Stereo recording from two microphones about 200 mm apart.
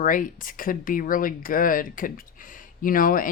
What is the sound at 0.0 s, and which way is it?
Speech, 40° left (ahead or behind).